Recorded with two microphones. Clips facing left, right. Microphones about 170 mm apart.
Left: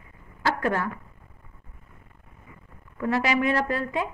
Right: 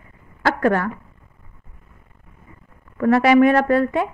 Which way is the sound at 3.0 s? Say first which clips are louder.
Right 11 dB; 65° right (ahead or behind).